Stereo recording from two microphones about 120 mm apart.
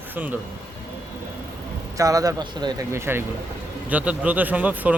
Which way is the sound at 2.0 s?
30° right (ahead or behind).